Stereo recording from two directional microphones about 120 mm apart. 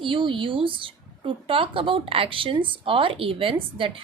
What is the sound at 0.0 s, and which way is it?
Speech, 45° right (ahead or behind).